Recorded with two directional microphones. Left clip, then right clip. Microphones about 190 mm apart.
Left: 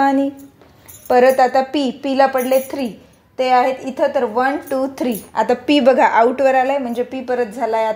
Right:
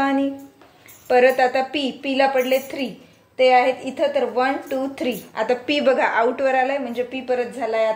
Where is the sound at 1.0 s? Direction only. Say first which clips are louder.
Left 4 dB; 45° left (ahead or behind).